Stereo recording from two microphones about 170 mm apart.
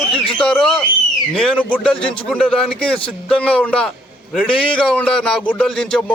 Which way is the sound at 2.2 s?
5° left (ahead or behind).